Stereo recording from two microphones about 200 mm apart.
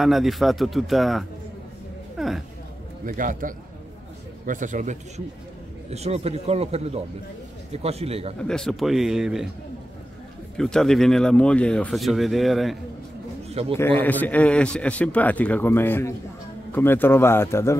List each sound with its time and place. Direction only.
0.0 s speech: centre (ahead or behind)
2.1 s a sound: centre (ahead or behind)
3.1 s a man's voice: 40° right (ahead or behind)
8.4 s speech: 5° left (ahead or behind)
10.6 s speech: centre (ahead or behind)
13.5 s bird: 30° right (ahead or behind)
13.7 s a man's voice: 10° left (ahead or behind)